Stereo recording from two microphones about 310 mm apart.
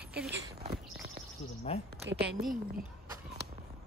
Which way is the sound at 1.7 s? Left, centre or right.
Centre.